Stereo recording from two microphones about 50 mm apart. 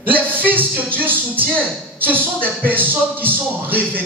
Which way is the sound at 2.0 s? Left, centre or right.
Right.